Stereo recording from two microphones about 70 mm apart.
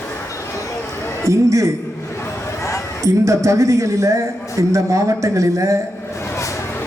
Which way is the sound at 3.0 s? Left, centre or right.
Right.